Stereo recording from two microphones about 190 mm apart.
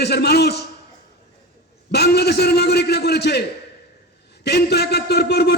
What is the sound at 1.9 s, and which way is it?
Speech, 60° left (ahead or behind).